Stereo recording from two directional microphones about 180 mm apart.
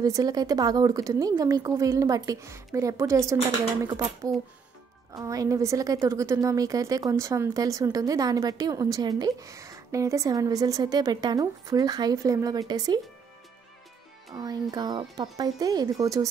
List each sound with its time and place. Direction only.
0.0 s a woman's voice: 20° right (ahead or behind)
14.3 s a woman's voice: 20° right (ahead or behind)